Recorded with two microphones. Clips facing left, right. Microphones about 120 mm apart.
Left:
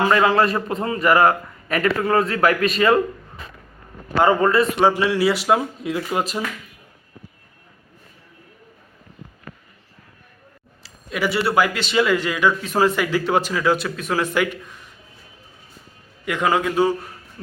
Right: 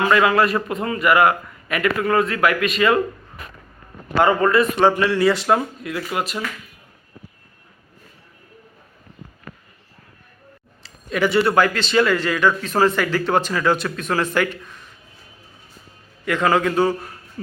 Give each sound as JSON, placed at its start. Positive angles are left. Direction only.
{"t": 0.0, "sound": "a man's voice", "side_deg": 30}
{"t": 4.2, "sound": "speech", "side_deg": 25}
{"t": 4.8, "sound": "speech", "side_deg": 10}
{"t": 5.8, "sound": "speech", "side_deg": 20}
{"t": 10.8, "sound": "speech", "side_deg": 5}
{"t": 16.2, "sound": "speech", "side_deg": 15}